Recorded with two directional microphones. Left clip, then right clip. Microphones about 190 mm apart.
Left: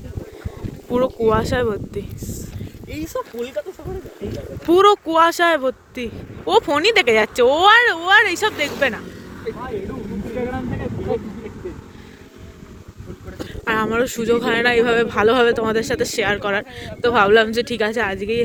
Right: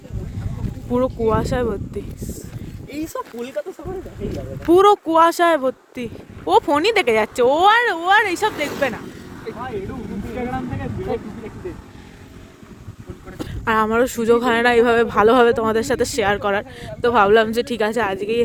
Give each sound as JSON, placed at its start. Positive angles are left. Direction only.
{"t": 0.9, "sound": "speech", "side_deg": -10}
{"t": 2.2, "sound": "a sound", "side_deg": -60}
{"t": 2.9, "sound": "speech", "side_deg": -70}
{"t": 4.7, "sound": "speech", "side_deg": -20}
{"t": 10.3, "sound": "vehicle", "side_deg": -20}
{"t": 13.7, "sound": "speech", "side_deg": -30}